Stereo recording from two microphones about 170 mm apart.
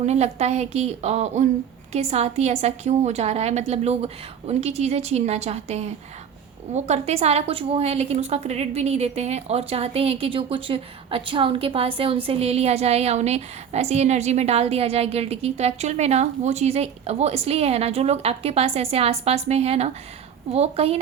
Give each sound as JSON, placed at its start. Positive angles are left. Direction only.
{"t": 0.0, "sound": "a woman's voice", "side_deg": -40}